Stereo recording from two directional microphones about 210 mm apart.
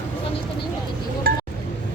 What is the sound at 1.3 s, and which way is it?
Chink, 45° right (ahead or behind).